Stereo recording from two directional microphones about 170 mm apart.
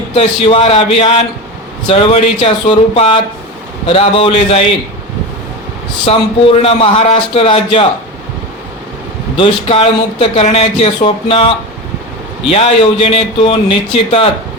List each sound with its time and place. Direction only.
0.1 s speech: 35° left (ahead or behind)
6.1 s speech: 35° left (ahead or behind)
9.4 s speech: 35° left (ahead or behind)